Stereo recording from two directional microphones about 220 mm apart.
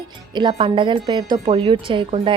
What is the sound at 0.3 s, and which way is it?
A woman's voice, 20° right (ahead or behind).